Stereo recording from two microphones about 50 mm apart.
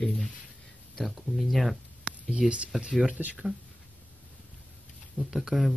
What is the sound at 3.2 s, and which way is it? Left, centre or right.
Speech, right.